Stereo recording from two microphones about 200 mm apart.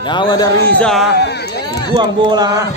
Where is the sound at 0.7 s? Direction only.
5° left (ahead or behind).